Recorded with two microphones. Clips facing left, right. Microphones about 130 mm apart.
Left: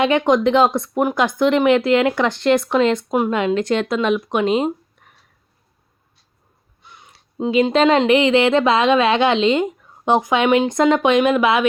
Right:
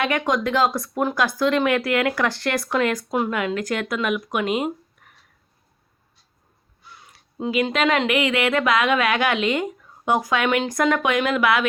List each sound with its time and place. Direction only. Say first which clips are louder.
0.0 s speech: left 7 dB; 25° left (ahead or behind)
6.8 s speech: left 1 dB; 20° left (ahead or behind)